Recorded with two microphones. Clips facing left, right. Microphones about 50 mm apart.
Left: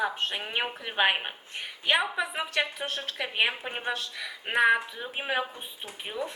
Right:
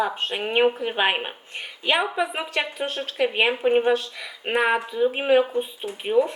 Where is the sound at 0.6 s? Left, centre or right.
Right.